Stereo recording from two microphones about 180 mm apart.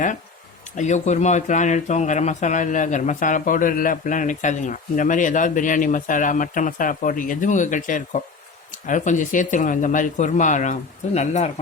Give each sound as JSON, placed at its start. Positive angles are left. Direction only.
{"t": 0.8, "sound": "speech", "side_deg": 40}